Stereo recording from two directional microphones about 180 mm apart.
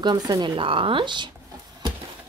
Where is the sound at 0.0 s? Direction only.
25° right (ahead or behind).